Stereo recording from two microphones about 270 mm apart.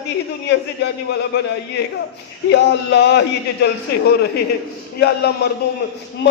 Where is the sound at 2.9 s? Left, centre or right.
Left.